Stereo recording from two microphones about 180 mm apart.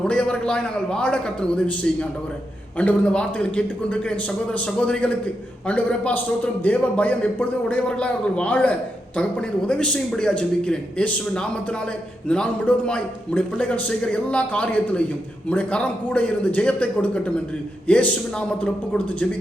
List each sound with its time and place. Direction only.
0.0 s a man's voice: 5° left (ahead or behind)